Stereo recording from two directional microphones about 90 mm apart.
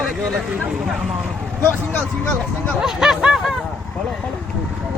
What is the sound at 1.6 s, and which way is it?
Speech, 20° left (ahead or behind).